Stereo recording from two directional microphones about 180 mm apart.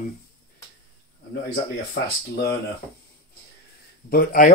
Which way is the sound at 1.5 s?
65° left (ahead or behind).